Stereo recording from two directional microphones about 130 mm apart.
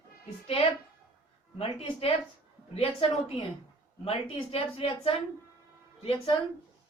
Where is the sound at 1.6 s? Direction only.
50° left (ahead or behind).